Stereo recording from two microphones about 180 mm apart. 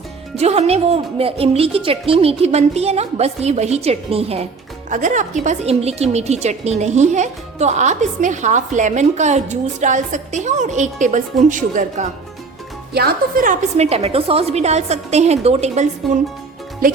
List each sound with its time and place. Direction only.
0.3 s speech: 35° right (ahead or behind)
4.9 s speech: 45° right (ahead or behind)
12.9 s speech: 60° right (ahead or behind); by 15.9 s 40° right (ahead or behind)